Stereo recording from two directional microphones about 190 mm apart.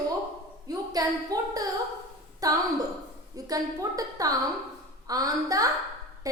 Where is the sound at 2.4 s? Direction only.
20° right (ahead or behind).